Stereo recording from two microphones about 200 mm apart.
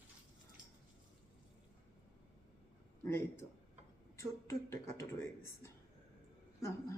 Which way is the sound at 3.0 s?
10° left (ahead or behind).